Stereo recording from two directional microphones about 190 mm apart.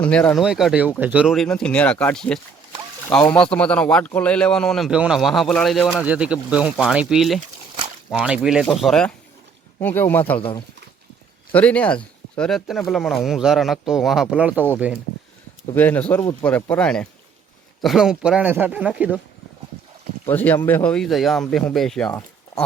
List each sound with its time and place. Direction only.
0.0 s speech: 5° left (ahead or behind)
6.0 s speech: 5° right (ahead or behind); by 10.4 s 10° left (ahead or behind)
11.5 s speech: 5° left (ahead or behind)
15.7 s speech: 10° left (ahead or behind); by 19.2 s 5° right (ahead or behind)
20.2 s speech: 10° left (ahead or behind)